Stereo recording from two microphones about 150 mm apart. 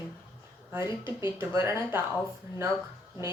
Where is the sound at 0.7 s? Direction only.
20° right (ahead or behind).